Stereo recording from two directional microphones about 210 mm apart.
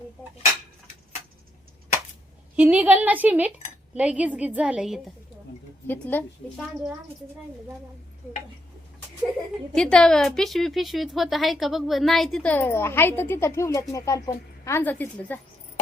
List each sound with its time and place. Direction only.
2.6 s a woman's voice: 5° right (ahead or behind)
5.9 s speech: 10° left (ahead or behind)
9.7 s a woman's voice: 5° left (ahead or behind)